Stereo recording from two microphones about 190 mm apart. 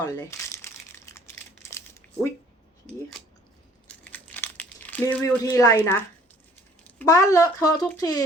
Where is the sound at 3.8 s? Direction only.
10° left (ahead or behind).